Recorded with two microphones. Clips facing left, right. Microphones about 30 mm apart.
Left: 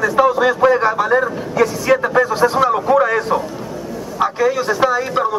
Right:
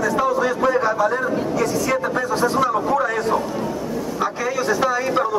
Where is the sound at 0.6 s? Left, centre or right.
Left.